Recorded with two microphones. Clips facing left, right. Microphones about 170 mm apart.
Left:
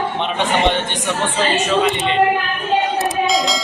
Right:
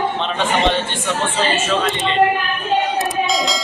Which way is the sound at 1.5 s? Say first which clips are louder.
Left 2 dB; 15° left (ahead or behind).